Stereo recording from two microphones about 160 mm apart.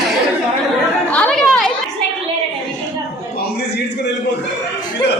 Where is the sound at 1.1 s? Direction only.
5° left (ahead or behind).